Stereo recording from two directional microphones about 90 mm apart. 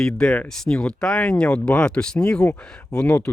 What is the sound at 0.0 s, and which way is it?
Speech, 10° left (ahead or behind).